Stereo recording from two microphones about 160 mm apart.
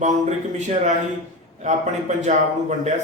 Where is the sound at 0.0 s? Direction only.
45° right (ahead or behind).